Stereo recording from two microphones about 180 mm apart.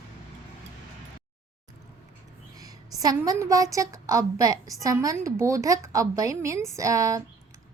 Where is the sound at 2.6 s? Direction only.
20° right (ahead or behind).